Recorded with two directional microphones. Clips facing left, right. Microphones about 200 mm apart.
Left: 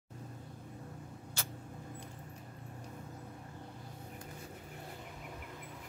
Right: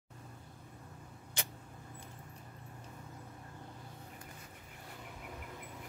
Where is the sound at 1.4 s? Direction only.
15° right (ahead or behind).